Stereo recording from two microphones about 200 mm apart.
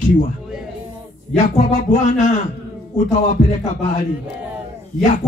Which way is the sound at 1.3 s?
40° left (ahead or behind).